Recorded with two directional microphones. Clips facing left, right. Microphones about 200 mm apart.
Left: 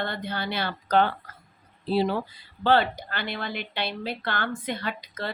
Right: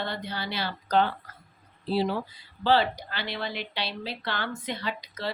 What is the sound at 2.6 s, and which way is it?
Speech, 55° left (ahead or behind).